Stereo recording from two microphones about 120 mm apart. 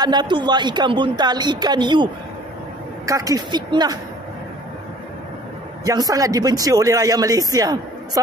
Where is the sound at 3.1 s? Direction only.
30° right (ahead or behind).